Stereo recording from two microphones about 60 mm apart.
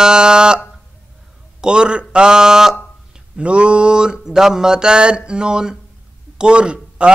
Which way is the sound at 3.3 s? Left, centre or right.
Centre.